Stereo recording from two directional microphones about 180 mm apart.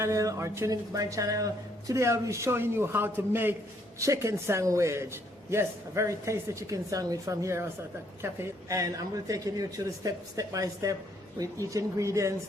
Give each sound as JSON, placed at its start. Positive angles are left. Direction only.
{"t": 0.0, "sound": "a man's voice", "side_deg": -20}